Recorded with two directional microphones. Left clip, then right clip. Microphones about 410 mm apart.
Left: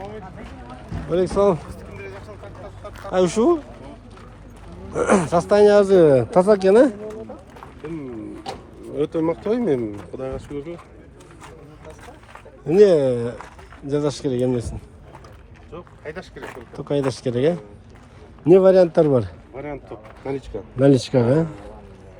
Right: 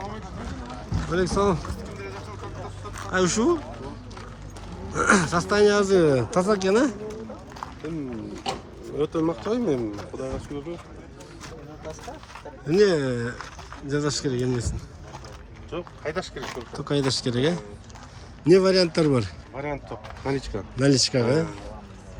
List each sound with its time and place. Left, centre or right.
1.1 s speech: centre
3.1 s speech: centre
4.9 s speech: centre
8.5 s a sound: right
9.2 s speech: centre
12.6 s speech: centre
15.7 s speech: right
16.7 s speech: centre
19.6 s speech: right
20.7 s speech: centre